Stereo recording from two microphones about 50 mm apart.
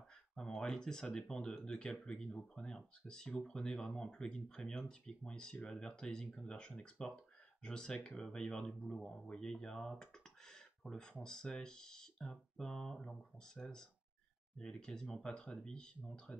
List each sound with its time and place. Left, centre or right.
0.4 s speech: centre
10.5 s a sound: centre
11.2 s speech: centre
16.3 s speech: centre